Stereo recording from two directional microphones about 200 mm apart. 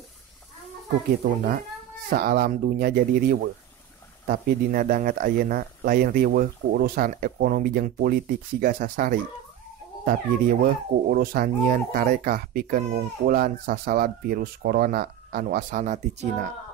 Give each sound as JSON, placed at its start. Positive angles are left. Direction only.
{"t": 1.2, "sound": "speech", "side_deg": -40}
{"t": 10.6, "sound": "speech", "side_deg": -50}